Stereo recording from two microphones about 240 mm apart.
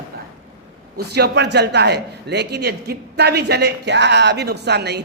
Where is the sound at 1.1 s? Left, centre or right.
Right.